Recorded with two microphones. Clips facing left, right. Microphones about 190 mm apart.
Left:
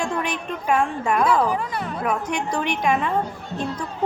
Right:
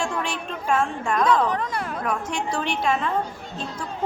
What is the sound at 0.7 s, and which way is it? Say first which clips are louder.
A woman's voice: left 2 dB; 10° left (ahead or behind).